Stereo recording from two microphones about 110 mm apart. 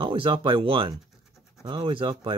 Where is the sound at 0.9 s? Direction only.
Centre (ahead or behind).